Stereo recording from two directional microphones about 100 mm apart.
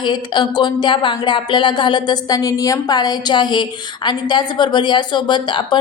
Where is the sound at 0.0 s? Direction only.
50° left (ahead or behind).